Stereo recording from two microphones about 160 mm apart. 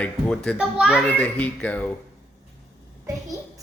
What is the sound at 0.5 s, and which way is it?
Speech, 5° right (ahead or behind).